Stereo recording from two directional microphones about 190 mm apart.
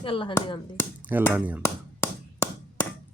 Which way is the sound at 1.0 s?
10° right (ahead or behind).